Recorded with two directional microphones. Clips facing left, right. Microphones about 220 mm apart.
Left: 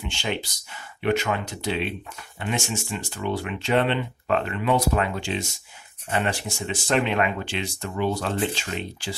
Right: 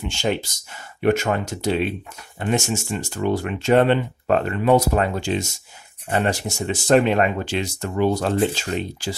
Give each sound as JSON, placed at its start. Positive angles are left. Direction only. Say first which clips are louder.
{"t": 0.0, "sound": "speech", "louder": "right 6 dB", "side_deg": -45}